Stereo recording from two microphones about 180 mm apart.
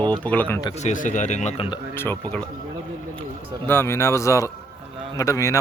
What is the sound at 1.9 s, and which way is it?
Speech, 10° left (ahead or behind).